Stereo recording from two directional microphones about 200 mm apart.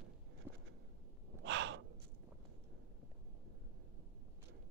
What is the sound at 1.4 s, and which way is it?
Gasp, 65° right (ahead or behind).